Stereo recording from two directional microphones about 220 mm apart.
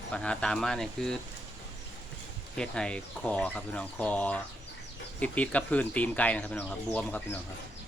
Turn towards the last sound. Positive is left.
turn(degrees=10)  # may be behind; listen again after turning